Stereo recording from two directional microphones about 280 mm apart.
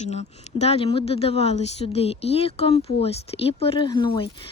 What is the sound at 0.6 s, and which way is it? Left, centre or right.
A woman's voice, left.